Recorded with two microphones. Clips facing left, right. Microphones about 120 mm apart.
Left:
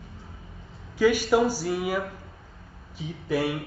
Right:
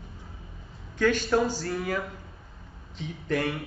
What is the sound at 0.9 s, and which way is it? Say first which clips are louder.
Speech: left 3 dB; 10° left (ahead or behind).